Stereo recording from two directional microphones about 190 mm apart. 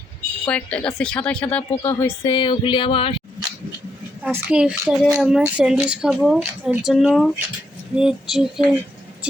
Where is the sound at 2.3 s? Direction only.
25° left (ahead or behind).